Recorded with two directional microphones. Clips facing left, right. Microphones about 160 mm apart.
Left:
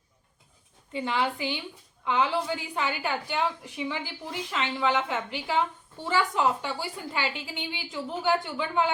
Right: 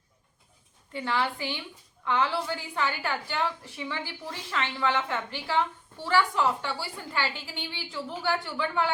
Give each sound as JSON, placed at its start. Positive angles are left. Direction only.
{"t": 0.9, "sound": "a woman's voice", "side_deg": 15}